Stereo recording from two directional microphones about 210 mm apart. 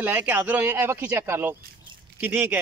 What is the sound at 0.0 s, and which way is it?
Speech, 10° right (ahead or behind).